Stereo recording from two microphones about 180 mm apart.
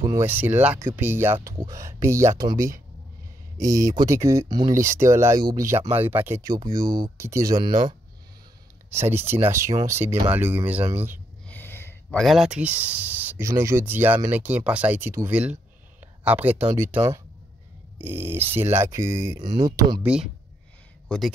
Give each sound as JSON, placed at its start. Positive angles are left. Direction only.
{"t": 0.0, "sound": "speech", "side_deg": -15}
{"t": 3.7, "sound": "speech", "side_deg": -20}
{"t": 8.9, "sound": "speech", "side_deg": -15}
{"t": 11.4, "sound": "speech", "side_deg": 10}
{"t": 20.0, "sound": "speech", "side_deg": -5}